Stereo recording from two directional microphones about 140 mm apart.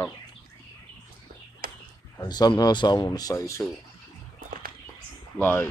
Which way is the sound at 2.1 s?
30° left (ahead or behind).